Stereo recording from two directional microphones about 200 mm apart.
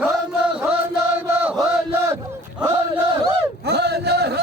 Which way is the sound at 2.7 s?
15° right (ahead or behind).